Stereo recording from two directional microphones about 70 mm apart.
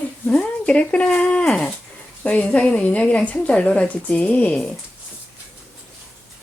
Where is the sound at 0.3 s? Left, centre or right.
Centre.